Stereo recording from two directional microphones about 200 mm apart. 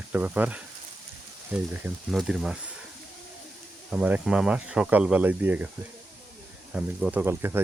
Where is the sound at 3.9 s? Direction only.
5° right (ahead or behind).